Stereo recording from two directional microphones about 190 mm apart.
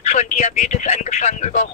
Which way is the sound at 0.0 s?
40° left (ahead or behind).